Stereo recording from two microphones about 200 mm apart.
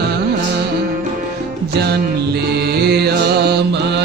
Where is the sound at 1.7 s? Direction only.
55° right (ahead or behind).